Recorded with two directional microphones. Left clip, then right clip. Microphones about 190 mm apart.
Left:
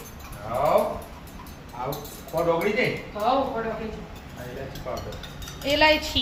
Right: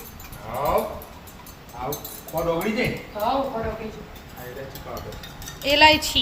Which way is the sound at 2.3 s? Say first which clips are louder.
Left 1 dB; centre (ahead or behind).